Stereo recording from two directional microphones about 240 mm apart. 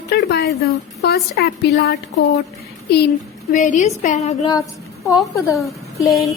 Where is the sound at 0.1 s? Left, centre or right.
Left.